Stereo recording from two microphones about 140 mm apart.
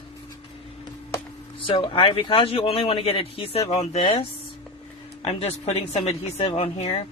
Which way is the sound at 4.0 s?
40° left (ahead or behind).